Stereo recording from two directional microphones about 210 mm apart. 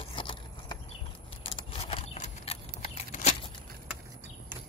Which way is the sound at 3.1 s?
30° left (ahead or behind).